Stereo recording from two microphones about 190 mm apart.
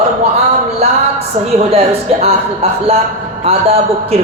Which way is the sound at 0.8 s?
35° right (ahead or behind).